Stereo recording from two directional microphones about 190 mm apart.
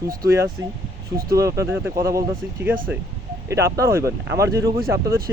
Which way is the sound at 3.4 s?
15° right (ahead or behind).